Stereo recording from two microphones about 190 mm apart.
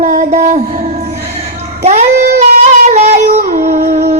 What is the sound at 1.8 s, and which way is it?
Child singing, 35° right (ahead or behind).